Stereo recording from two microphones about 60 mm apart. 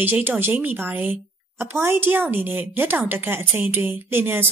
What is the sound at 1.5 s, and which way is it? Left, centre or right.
A woman's voice, right.